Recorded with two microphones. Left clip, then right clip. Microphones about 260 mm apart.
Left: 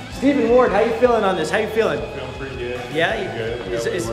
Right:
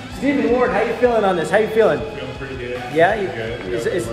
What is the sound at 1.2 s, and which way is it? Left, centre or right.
Speech, centre.